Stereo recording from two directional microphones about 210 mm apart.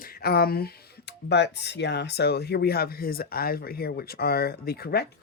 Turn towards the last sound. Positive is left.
turn(degrees=50)  # may be behind; listen again after turning